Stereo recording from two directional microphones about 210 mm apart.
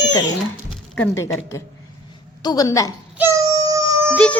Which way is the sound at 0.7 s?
5° left (ahead or behind).